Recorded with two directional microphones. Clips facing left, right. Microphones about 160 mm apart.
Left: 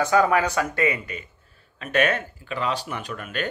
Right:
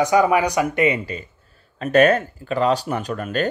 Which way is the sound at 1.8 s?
40° right (ahead or behind).